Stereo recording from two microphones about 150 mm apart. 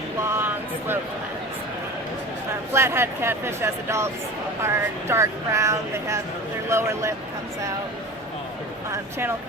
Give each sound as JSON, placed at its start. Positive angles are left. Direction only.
{"t": 0.3, "sound": "a sound", "side_deg": -15}
{"t": 2.7, "sound": "speech", "side_deg": -15}
{"t": 8.9, "sound": "speech", "side_deg": -15}